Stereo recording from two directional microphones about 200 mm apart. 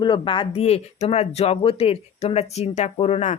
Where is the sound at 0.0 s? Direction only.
25° left (ahead or behind).